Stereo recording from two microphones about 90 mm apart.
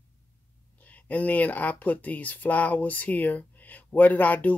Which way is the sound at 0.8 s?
15° left (ahead or behind).